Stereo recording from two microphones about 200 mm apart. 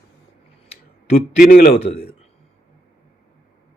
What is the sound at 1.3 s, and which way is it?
Speech, 45° left (ahead or behind).